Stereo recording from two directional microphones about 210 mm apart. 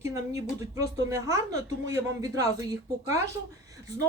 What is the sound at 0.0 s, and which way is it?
Speech, 15° right (ahead or behind).